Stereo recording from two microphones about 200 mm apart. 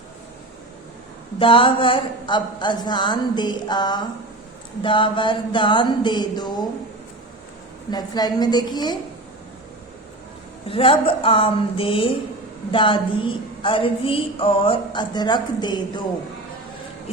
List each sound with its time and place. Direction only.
1.4 s a woman's voice: 25° left (ahead or behind)
7.9 s a woman's voice: 20° left (ahead or behind)
10.7 s a woman's voice: 25° left (ahead or behind)